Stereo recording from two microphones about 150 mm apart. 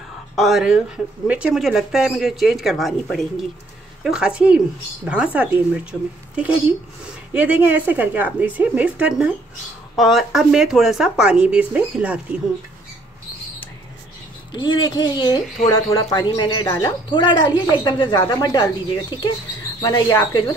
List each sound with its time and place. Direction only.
0.4 s speech: centre (ahead or behind)
14.5 s a woman's voice: 30° left (ahead or behind)